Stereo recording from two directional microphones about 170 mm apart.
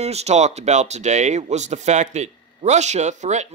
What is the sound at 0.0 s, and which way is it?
A man's voice, 40° right (ahead or behind).